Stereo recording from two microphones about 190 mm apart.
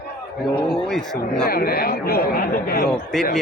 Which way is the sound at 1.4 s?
55° left (ahead or behind).